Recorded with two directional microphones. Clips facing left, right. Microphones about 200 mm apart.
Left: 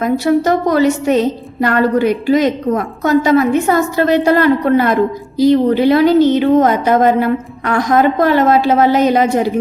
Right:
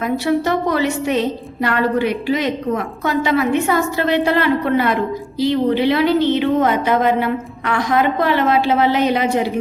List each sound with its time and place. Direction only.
0.0 s a woman's voice: 40° left (ahead or behind)